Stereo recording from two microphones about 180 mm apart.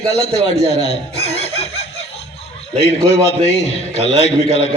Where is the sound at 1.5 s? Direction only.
35° left (ahead or behind).